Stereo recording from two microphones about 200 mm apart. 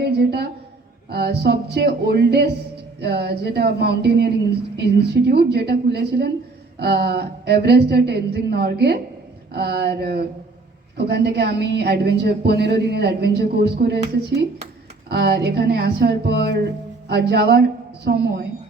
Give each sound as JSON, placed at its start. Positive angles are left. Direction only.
{"t": 0.0, "sound": "a sound", "side_deg": -55}
{"t": 1.1, "sound": "a woman's voice", "side_deg": -55}
{"t": 15.1, "sound": "a woman's voice", "side_deg": -55}